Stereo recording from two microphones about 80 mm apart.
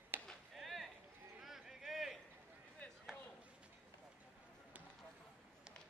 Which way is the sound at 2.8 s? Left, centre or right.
Centre.